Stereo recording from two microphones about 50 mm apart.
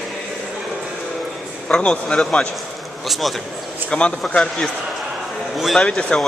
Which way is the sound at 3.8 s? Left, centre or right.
Left.